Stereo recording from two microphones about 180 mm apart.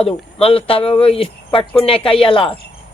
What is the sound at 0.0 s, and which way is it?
A man's voice, 35° left (ahead or behind).